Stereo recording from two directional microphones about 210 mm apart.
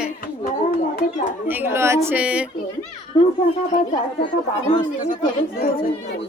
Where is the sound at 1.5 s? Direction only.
10° right (ahead or behind).